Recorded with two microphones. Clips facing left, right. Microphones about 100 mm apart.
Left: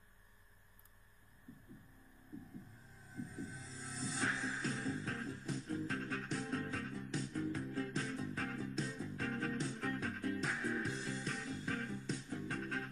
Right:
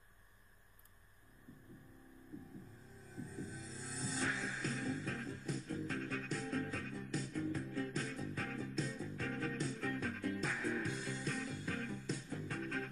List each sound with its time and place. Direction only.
3.2 s music: 35° left (ahead or behind)
11.1 s music: 40° right (ahead or behind)
11.5 s music: 35° left (ahead or behind)